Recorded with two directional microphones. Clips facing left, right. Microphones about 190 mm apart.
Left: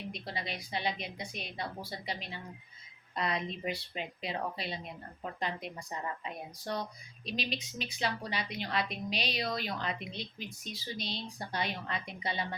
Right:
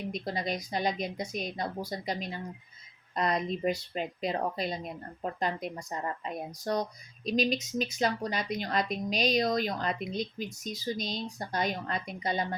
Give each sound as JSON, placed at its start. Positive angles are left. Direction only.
{"t": 0.1, "sound": "a woman's voice", "side_deg": -45}